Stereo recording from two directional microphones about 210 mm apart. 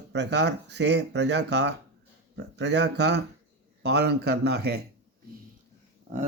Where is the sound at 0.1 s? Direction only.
55° right (ahead or behind).